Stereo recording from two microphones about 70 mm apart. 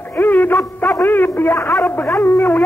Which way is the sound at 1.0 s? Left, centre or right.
Left.